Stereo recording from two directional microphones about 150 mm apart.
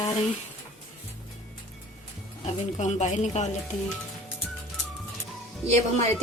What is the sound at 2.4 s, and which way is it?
Speech, 50° left (ahead or behind).